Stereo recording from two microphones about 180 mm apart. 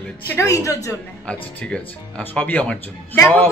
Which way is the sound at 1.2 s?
5° left (ahead or behind).